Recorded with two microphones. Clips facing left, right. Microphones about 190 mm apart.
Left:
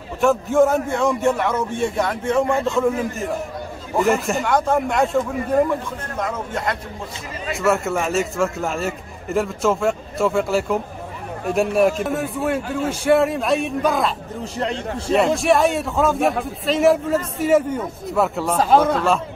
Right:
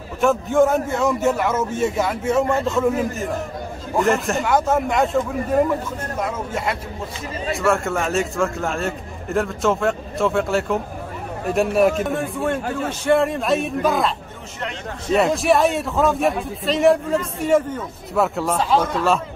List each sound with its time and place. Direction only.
0.2 s a man's voice: centre (ahead or behind)
14.6 s a man's voice: 35° left (ahead or behind)
15.1 s a man's voice: centre (ahead or behind)